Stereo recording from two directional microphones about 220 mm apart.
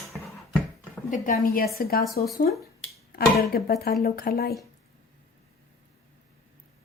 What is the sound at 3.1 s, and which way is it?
Speech, 45° left (ahead or behind).